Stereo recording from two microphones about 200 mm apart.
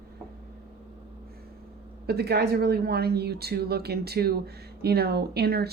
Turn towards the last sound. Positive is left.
turn(degrees=-50)  # may be behind; listen again after turning